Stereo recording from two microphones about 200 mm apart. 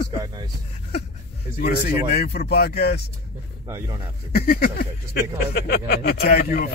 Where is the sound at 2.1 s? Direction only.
50° left (ahead or behind).